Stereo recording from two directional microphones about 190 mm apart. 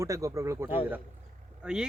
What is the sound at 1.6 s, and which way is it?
Speech, 5° right (ahead or behind).